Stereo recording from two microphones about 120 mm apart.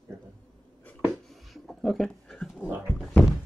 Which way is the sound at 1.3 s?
Centre (ahead or behind).